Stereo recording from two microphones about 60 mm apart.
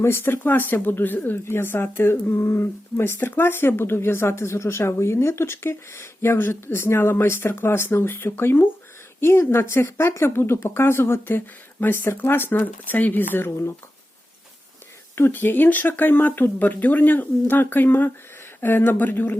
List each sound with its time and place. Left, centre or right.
0.0 s speech: left
15.1 s speech: left